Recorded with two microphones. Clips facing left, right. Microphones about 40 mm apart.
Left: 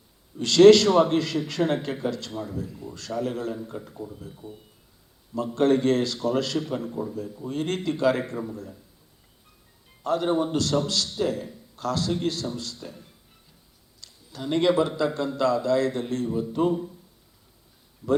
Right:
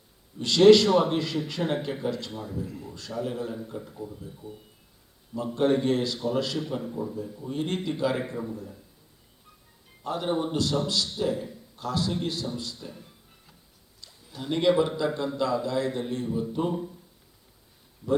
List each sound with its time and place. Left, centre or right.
0.4 s a man's voice: centre
3.5 s a man's voice: centre
4.3 s a man's voice: left
5.4 s a man's voice: centre
10.0 s a man's voice: centre
14.3 s a man's voice: centre
16.2 s speech: centre